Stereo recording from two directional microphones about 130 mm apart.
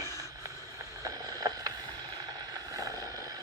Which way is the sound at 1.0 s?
30° right (ahead or behind).